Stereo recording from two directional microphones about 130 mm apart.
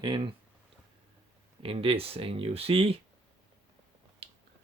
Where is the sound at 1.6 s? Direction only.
45° right (ahead or behind).